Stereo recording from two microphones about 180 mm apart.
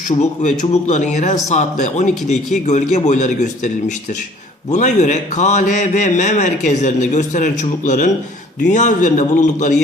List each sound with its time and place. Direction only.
0.1 s a man's voice: 40° left (ahead or behind)